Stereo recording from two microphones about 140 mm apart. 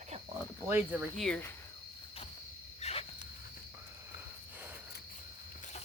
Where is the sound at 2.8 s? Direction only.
45° left (ahead or behind).